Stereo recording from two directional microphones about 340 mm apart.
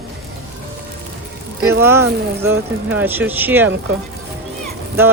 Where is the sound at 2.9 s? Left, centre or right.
Centre.